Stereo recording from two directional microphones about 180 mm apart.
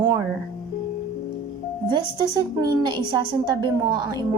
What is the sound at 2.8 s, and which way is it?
Music, 25° right (ahead or behind).